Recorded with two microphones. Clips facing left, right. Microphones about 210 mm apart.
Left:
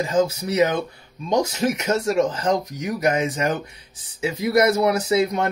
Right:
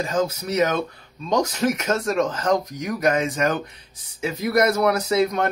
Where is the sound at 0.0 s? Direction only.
15° left (ahead or behind).